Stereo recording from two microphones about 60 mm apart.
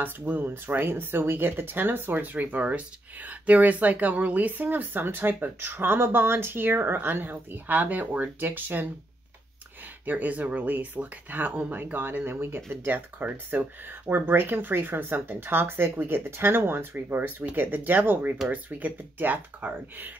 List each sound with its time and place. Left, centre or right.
0.0 s speech: right
10.0 s speech: right
12.8 s speech: right